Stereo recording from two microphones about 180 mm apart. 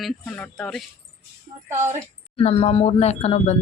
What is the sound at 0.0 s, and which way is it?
Speech, 5° left (ahead or behind).